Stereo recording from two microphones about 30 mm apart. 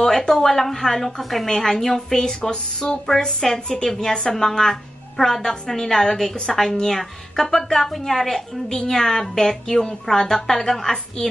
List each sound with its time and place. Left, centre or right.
0.3 s speech: centre